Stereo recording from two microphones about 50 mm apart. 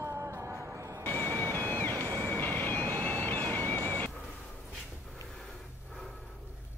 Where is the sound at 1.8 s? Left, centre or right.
Left.